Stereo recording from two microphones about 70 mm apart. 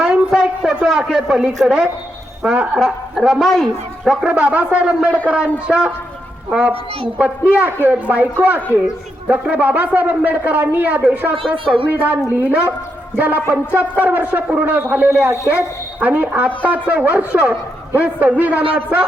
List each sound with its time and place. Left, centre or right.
0.0 s a sound: centre
0.7 s speech: centre
3.3 s speech: centre
4.3 s a man's voice: centre